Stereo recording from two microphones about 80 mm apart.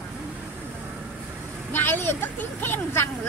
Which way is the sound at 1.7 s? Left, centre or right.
Left.